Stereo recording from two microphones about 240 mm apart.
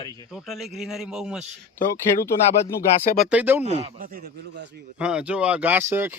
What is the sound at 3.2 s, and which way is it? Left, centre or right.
Speech, centre.